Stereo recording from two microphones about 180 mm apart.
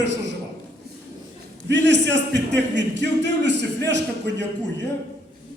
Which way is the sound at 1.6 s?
75° right (ahead or behind).